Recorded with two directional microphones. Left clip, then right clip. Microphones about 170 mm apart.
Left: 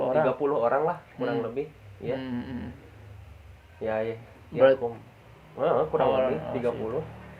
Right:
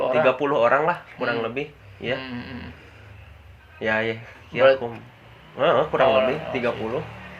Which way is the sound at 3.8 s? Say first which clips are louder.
Right 6 dB; 45° right (ahead or behind).